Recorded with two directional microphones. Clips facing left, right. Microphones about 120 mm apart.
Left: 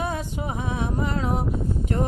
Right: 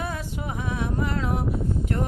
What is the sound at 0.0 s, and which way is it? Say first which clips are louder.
Music: left 3 dB; 20° left (ahead or behind).